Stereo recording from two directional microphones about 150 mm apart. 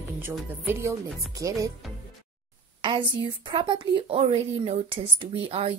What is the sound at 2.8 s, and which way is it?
A woman's voice, 35° right (ahead or behind).